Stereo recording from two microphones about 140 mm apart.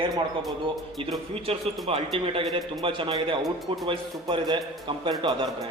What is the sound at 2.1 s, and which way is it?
A man's voice, 40° right (ahead or behind).